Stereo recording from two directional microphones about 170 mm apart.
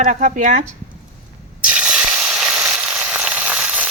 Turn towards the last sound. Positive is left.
turn(degrees=-5)  # may be behind; listen again after turning